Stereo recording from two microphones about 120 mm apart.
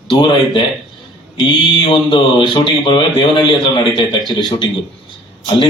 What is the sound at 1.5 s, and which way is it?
Speech, 45° left (ahead or behind).